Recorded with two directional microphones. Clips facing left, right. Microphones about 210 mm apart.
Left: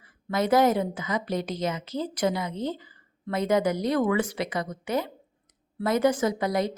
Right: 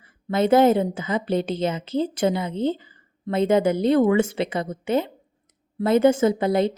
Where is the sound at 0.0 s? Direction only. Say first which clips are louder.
Right 5 dB; 25° right (ahead or behind).